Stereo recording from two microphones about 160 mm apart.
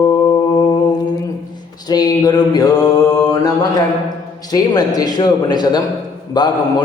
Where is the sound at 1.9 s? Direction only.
25° left (ahead or behind).